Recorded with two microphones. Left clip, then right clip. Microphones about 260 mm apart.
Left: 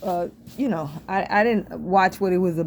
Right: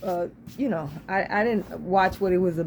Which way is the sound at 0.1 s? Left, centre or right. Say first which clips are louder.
Left 2 dB; left.